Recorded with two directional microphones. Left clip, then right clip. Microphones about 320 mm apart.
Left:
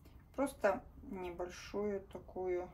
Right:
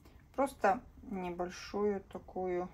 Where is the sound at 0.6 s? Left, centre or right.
Right.